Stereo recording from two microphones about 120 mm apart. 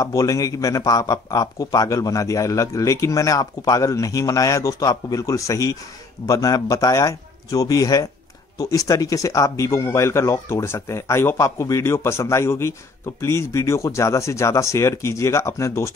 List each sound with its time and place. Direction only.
0.0 s speech: 30° left (ahead or behind)